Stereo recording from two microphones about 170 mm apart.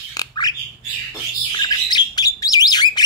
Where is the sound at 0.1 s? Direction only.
25° left (ahead or behind).